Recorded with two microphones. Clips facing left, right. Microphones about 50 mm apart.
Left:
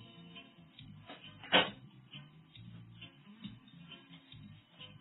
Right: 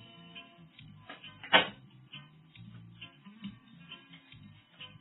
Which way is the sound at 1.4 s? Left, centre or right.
Right.